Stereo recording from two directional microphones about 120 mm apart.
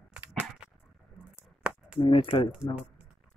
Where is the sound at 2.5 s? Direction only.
10° right (ahead or behind).